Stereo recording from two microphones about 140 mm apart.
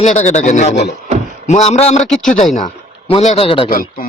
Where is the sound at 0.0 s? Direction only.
55° left (ahead or behind).